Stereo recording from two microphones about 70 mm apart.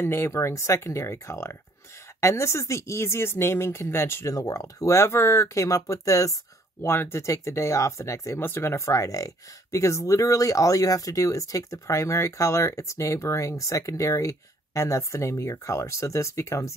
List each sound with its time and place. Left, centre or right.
0.0 s speech: left
4.3 s speech: left
6.8 s speech: left
8.4 s speech: left